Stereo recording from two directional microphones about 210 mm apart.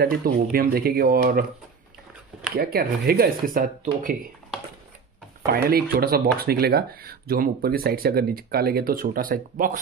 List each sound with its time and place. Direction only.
0.0 s speech: 45° right (ahead or behind)
2.5 s speech: 45° right (ahead or behind)
5.5 s speech: 45° right (ahead or behind)